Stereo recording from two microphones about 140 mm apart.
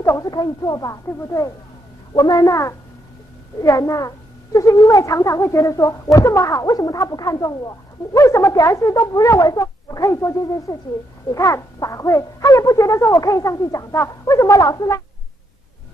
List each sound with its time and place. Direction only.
0.0 s speech: 25° left (ahead or behind)